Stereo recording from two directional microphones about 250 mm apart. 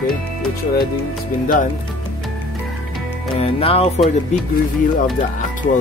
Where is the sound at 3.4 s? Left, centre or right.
Left.